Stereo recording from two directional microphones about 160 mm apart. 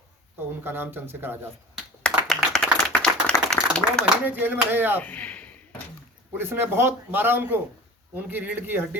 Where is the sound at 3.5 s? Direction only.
5° left (ahead or behind).